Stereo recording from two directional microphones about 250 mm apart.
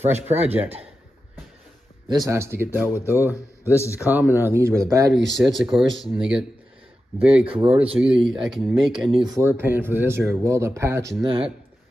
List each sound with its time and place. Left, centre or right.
0.1 s speech: right
2.0 s speech: centre
3.7 s a man's voice: centre
4.0 s speech: centre
5.5 s speech: centre
7.4 s speech: right
7.7 s speech: centre